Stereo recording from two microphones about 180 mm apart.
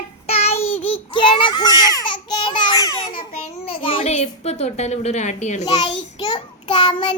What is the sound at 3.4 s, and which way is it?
A child's voice, 30° left (ahead or behind).